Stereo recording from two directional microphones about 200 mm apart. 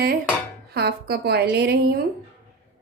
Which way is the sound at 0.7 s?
55° right (ahead or behind).